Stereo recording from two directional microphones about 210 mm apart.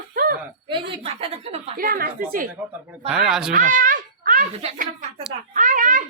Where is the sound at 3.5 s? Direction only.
40° right (ahead or behind).